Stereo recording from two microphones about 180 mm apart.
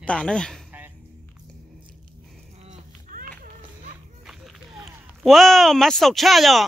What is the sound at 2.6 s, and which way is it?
Cat, 45° right (ahead or behind).